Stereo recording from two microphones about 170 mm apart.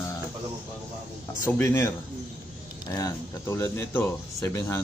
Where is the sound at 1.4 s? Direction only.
15° left (ahead or behind).